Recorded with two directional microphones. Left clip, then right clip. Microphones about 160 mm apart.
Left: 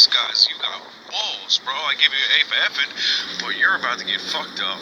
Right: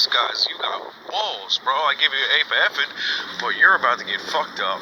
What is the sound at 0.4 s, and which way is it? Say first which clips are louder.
Whispering: left 5 dB; 60° right (ahead or behind).